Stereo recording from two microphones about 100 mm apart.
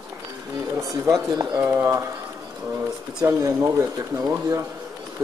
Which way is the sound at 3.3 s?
35° right (ahead or behind).